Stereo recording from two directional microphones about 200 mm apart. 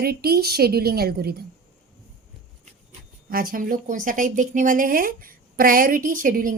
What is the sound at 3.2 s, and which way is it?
A woman's voice, 45° right (ahead or behind).